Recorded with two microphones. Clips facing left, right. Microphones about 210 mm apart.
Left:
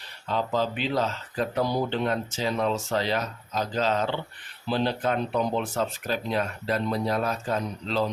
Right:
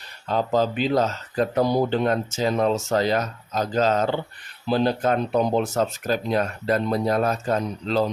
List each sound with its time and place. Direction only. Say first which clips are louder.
0.3 s speech: right 5 dB; 40° right (ahead or behind)